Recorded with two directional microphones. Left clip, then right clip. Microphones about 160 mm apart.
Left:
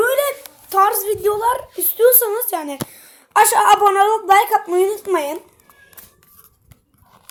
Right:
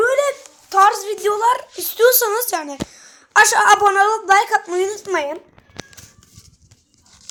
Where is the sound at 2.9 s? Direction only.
15° left (ahead or behind).